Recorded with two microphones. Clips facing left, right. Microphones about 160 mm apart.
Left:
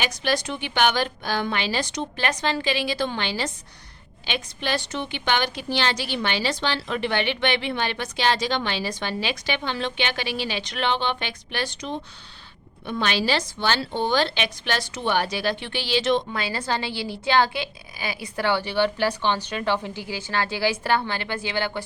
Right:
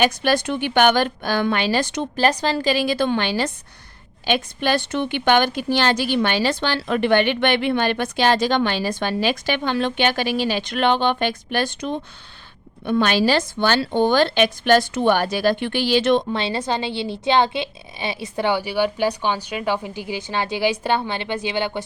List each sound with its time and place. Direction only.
0.0 s a woman's voice: 55° right (ahead or behind)
2.1 s a woman's voice: 35° right (ahead or behind); by 16.2 s 55° right (ahead or behind)
16.3 s a woman's voice: 25° right (ahead or behind)